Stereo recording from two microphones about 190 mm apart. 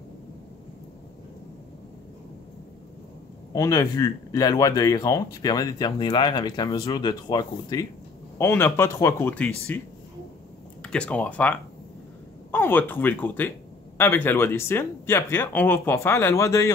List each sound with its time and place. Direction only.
3.5 s speech: 20° left (ahead or behind)